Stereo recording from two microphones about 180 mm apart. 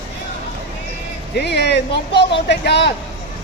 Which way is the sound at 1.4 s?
65° left (ahead or behind).